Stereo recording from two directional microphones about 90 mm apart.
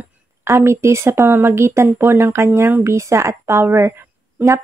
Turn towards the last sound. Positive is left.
turn(degrees=-30)  # may be behind; listen again after turning